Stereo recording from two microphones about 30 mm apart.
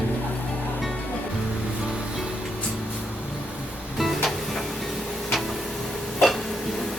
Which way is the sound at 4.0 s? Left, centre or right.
Centre.